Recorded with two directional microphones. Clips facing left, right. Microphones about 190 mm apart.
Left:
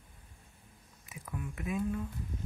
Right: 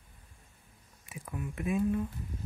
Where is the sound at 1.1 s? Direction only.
30° right (ahead or behind).